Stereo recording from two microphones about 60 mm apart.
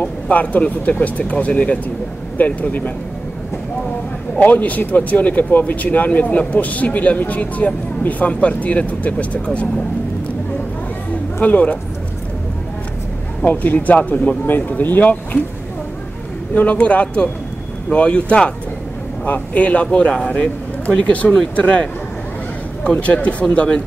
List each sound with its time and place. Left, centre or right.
0.0 s speech: left
4.4 s speech: left
11.4 s speech: left
13.4 s speech: left
16.5 s speech: left
22.8 s speech: left